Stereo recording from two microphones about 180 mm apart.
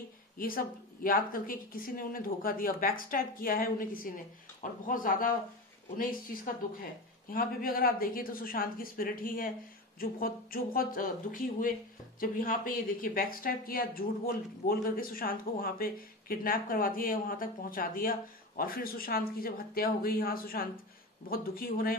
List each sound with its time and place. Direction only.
0.4 s speech: 50° left (ahead or behind)